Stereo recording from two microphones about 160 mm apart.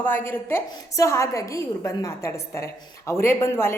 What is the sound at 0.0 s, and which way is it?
A woman's voice, 15° left (ahead or behind).